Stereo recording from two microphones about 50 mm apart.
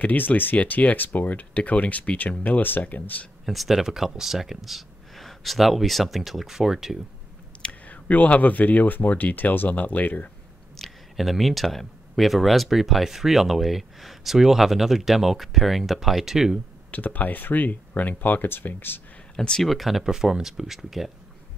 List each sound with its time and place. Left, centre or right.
0.0 s speech: left
3.4 s speech: centre
7.8 s speech: left
10.8 s speech: centre
16.9 s speech: left
19.3 s speech: centre
19.6 s speech: centre